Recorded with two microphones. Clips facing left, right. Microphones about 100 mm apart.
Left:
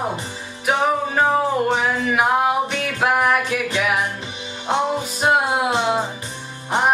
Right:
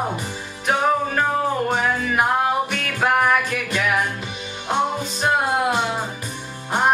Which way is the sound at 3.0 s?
5° left (ahead or behind).